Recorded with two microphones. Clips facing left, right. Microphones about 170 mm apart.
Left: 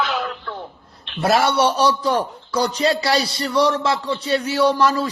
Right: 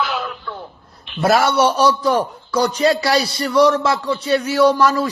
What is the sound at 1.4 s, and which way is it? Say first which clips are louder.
A man's voice: right 2 dB; 30° left (ahead or behind).